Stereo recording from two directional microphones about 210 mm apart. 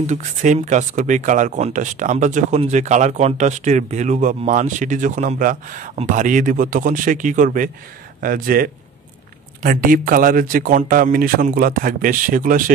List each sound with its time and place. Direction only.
0.0 s speech: 35° right (ahead or behind)